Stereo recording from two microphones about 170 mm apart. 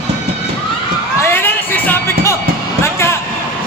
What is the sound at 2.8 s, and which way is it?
Vehicle, 15° left (ahead or behind).